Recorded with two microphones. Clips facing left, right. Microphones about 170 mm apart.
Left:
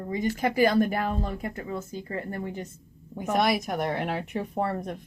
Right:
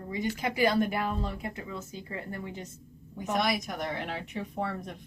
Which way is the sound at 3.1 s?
50° left (ahead or behind).